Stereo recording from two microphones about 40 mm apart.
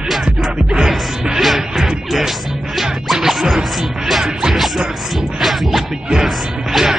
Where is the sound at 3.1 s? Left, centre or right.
Centre.